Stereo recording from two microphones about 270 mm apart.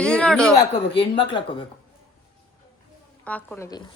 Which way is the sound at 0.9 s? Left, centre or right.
Centre.